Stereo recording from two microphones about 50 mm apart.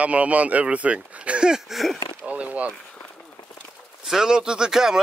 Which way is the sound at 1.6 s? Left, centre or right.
Centre.